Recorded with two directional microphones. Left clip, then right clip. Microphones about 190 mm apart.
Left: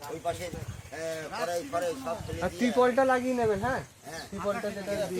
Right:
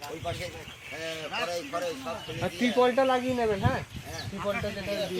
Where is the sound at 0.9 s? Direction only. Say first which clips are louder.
Right 1 dB; 10° left (ahead or behind).